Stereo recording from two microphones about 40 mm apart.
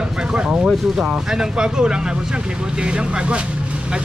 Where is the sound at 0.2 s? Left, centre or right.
Right.